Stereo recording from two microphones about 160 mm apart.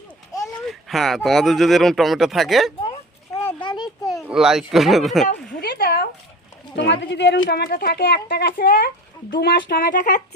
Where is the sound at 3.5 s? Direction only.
30° left (ahead or behind).